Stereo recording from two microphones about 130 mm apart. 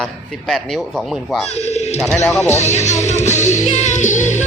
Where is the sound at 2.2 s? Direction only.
15° left (ahead or behind).